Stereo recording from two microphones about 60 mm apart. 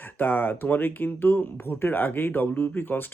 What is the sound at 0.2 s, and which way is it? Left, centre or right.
Speech, left.